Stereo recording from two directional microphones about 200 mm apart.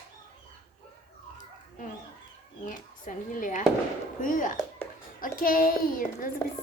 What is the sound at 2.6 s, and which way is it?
A woman's voice, 40° left (ahead or behind).